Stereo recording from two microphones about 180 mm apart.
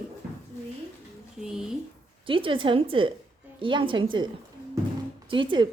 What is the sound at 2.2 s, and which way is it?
A woman's voice, 30° right (ahead or behind).